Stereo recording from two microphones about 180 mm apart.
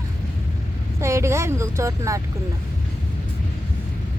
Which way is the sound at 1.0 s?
15° right (ahead or behind).